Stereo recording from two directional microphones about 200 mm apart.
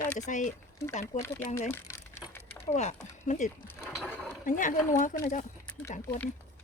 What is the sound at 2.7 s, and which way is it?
Speech, 35° left (ahead or behind).